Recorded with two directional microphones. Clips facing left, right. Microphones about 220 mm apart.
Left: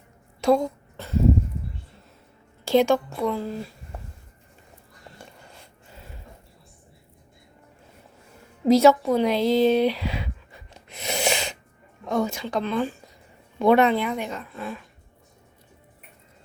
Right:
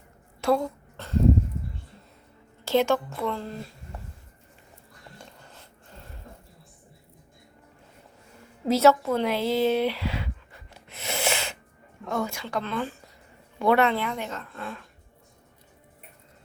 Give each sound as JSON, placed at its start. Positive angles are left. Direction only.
{"t": 0.4, "sound": "a sound", "side_deg": 15}
{"t": 2.6, "sound": "speech", "side_deg": 15}
{"t": 5.2, "sound": "a sound", "side_deg": 10}
{"t": 8.6, "sound": "speech", "side_deg": 15}
{"t": 10.8, "sound": "sneeze", "side_deg": 15}
{"t": 12.0, "sound": "a woman's voice", "side_deg": 20}